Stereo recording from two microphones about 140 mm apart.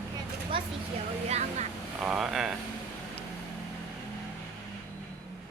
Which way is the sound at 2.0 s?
5° right (ahead or behind).